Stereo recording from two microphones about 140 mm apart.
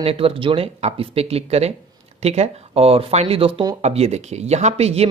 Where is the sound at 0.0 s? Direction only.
40° right (ahead or behind).